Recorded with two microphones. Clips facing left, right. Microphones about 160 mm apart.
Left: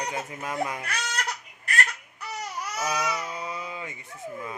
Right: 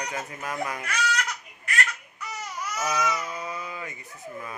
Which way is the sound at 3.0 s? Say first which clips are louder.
Right 2 dB; 25° left (ahead or behind).